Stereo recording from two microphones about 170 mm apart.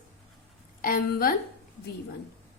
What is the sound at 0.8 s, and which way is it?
Speech, 55° left (ahead or behind).